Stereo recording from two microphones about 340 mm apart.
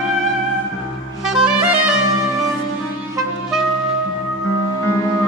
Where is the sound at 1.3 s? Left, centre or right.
Centre.